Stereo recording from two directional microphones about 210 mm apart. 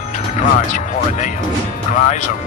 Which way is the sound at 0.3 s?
35° left (ahead or behind).